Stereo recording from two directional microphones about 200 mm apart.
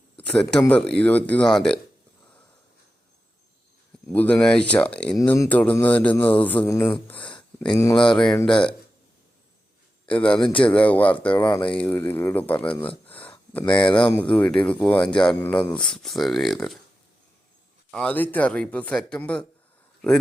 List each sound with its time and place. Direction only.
0.2 s speech: 5° left (ahead or behind)
4.1 s speech: 5° left (ahead or behind)
7.2 s a sound: 25° left (ahead or behind)
7.7 s speech: 15° left (ahead or behind)
7.9 s speech: 5° left (ahead or behind)
10.1 s speech: 5° left (ahead or behind)
11.4 s speech: 20° left (ahead or behind)
11.7 s speech: 10° left (ahead or behind)
12.7 s speech: 25° left (ahead or behind)
13.3 s a sound: 10° left (ahead or behind)
14.2 s speech: 5° left (ahead or behind)
15.5 s speech: 25° left (ahead or behind)
15.8 s speech: centre (ahead or behind)
17.9 s speech: 5° left (ahead or behind)